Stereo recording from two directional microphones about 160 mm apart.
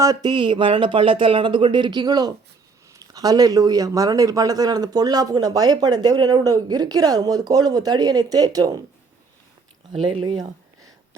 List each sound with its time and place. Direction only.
0.0 s speech: 25° right (ahead or behind)
9.9 s speech: 40° right (ahead or behind)
10.3 s a sound: 20° right (ahead or behind)